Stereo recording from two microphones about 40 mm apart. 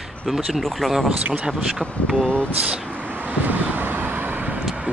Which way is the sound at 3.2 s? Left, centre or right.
Right.